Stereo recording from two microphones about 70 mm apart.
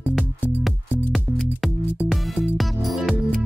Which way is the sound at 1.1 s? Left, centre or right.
Centre.